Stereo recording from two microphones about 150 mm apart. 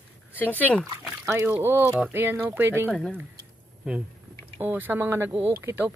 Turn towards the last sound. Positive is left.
turn(degrees=-15)  # may be behind; listen again after turning